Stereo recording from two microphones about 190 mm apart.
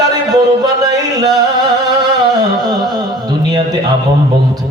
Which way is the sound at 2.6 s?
20° right (ahead or behind).